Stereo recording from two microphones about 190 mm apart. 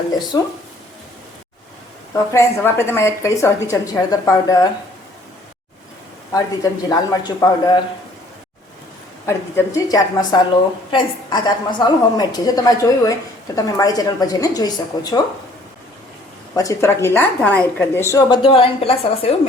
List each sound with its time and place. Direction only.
0.3 s a woman's voice: 20° left (ahead or behind)
2.1 s a woman's voice: 15° left (ahead or behind)
6.3 s a woman's voice: 20° left (ahead or behind)
9.2 s a woman's voice: 15° left (ahead or behind)
16.6 s a woman's voice: 15° left (ahead or behind)
18.3 s a woman's voice: 30° left (ahead or behind)